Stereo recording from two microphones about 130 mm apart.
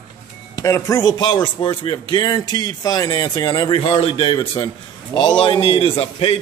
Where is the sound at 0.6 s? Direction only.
25° left (ahead or behind).